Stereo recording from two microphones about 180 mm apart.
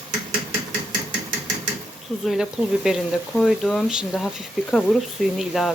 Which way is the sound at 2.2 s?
Centre (ahead or behind).